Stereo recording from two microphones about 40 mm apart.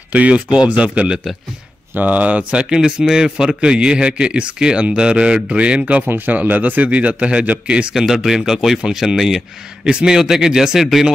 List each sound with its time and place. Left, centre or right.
0.1 s speech: right
2.0 s speech: right
2.8 s speech: centre; by 6.0 s right
6.0 s speech: right
7.9 s speech: centre
9.8 s speech: right
10.2 s speech: centre